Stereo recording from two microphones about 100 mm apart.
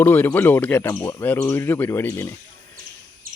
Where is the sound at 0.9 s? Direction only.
35° left (ahead or behind).